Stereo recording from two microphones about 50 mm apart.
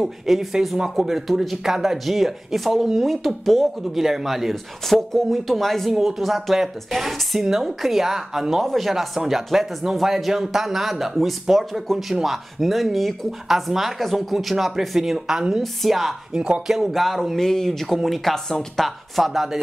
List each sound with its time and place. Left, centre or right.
0.0 s speech: centre
15.6 s speech: centre
16.3 s speech: centre
16.7 s speech: centre